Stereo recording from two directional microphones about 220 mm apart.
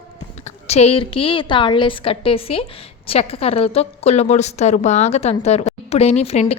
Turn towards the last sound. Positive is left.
turn(degrees=30)  # may be behind; listen again after turning